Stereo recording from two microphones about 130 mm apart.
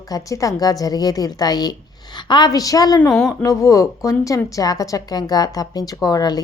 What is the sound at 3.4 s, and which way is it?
A woman's voice, 25° left (ahead or behind).